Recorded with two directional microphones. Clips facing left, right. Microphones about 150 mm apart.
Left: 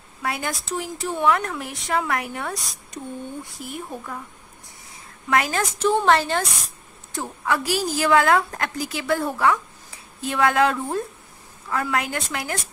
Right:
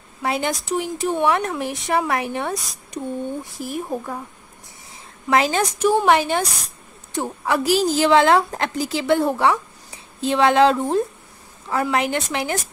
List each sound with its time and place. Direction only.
0.2 s a woman's voice: 25° right (ahead or behind)
2.5 s speech: centre (ahead or behind)
3.4 s speech: 20° left (ahead or behind)
3.9 s speech: 30° right (ahead or behind)
5.3 s a woman's voice: 20° right (ahead or behind)